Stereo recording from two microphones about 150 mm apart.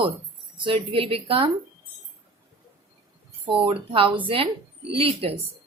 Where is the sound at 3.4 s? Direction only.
35° right (ahead or behind).